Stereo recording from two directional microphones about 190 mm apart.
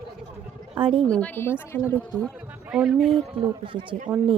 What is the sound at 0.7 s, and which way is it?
Speech, 30° right (ahead or behind).